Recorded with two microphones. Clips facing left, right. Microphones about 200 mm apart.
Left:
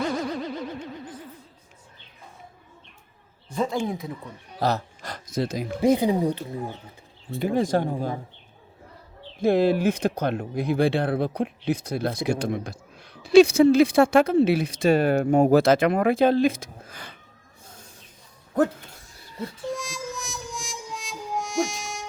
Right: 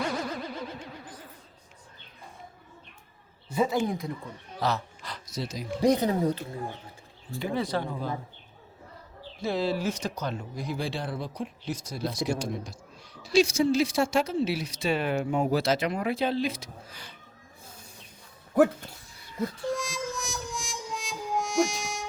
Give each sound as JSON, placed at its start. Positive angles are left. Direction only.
{"t": 3.5, "sound": "speech", "side_deg": -5}
{"t": 4.6, "sound": "speech", "side_deg": 45}
{"t": 5.9, "sound": "speech", "side_deg": 10}
{"t": 7.3, "sound": "speech", "side_deg": 45}
{"t": 9.4, "sound": "speech", "side_deg": 55}
{"t": 19.6, "sound": "music", "side_deg": 0}